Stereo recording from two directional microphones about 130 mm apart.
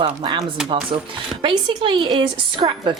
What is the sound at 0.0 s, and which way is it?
Speech, 35° right (ahead or behind).